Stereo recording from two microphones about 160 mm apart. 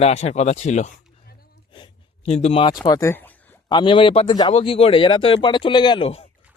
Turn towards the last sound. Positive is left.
turn(degrees=35)  # may be behind; listen again after turning